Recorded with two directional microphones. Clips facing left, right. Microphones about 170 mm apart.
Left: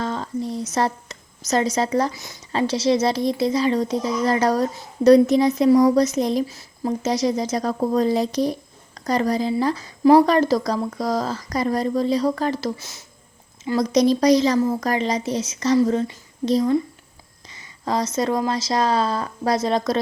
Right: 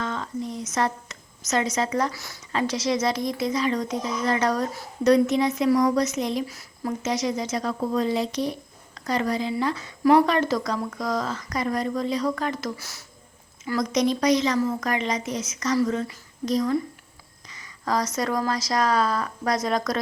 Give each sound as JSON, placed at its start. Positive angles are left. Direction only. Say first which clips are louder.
{"t": 0.0, "sound": "a woman's voice", "louder": "left 4 dB", "side_deg": 35}
{"t": 2.1, "sound": "speech", "louder": "left 1 dB", "side_deg": 20}
{"t": 2.5, "sound": "speech", "louder": "left 5 dB", "side_deg": 30}
{"t": 13.7, "sound": "speech", "louder": "left 5 dB", "side_deg": 30}